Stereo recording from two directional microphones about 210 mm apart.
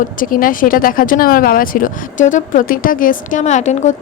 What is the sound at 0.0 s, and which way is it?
A woman's voice, 40° left (ahead or behind).